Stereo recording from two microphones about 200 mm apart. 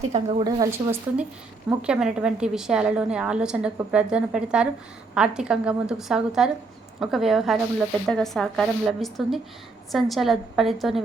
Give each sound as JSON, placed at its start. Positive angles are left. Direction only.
{"t": 0.1, "sound": "a woman's voice", "side_deg": -30}
{"t": 0.4, "sound": "speech", "side_deg": -15}